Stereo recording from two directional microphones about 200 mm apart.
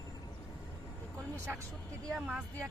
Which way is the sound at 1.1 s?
15° right (ahead or behind).